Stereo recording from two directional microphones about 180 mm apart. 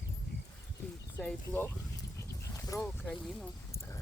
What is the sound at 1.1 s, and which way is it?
Speech, 10° left (ahead or behind).